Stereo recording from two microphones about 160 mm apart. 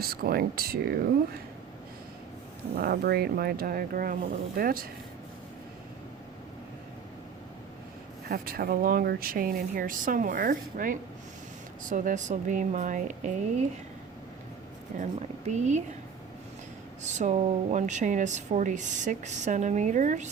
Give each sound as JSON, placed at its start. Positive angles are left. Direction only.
{"t": 0.0, "sound": "speech", "side_deg": -70}
{"t": 2.7, "sound": "speech", "side_deg": -75}
{"t": 8.3, "sound": "speech", "side_deg": -65}
{"t": 14.9, "sound": "speech", "side_deg": -50}
{"t": 17.0, "sound": "speech", "side_deg": -50}